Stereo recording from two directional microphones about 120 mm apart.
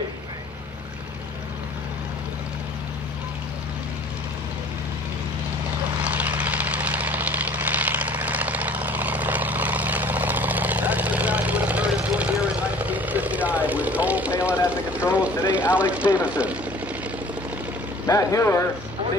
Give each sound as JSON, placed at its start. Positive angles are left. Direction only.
{"t": 5.9, "sound": "vehicle", "side_deg": -10}
{"t": 18.0, "sound": "vehicle", "side_deg": 25}